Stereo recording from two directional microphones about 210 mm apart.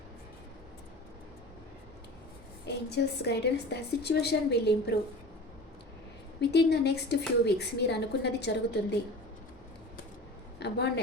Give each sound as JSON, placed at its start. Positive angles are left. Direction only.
{"t": 2.6, "sound": "a woman's voice", "side_deg": 55}
{"t": 6.4, "sound": "a woman's voice", "side_deg": 50}
{"t": 10.6, "sound": "a woman's voice", "side_deg": 55}